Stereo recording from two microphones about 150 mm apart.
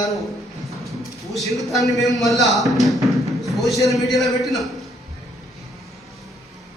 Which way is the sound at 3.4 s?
Centre (ahead or behind).